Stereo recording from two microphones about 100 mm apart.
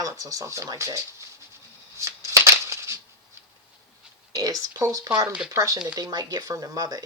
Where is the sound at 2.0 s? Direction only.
35° right (ahead or behind).